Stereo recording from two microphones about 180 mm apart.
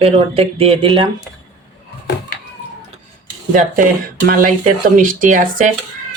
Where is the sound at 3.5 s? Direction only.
50° right (ahead or behind).